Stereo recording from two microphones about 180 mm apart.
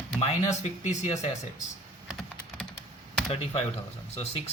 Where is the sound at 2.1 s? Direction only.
5° left (ahead or behind).